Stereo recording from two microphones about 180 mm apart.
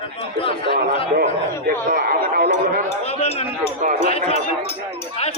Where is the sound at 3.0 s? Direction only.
35° left (ahead or behind).